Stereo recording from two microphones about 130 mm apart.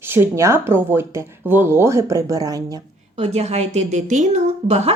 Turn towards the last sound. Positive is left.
turn(degrees=-60)  # may be behind; listen again after turning